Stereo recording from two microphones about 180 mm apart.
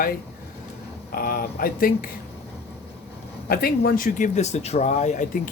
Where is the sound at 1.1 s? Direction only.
55° left (ahead or behind).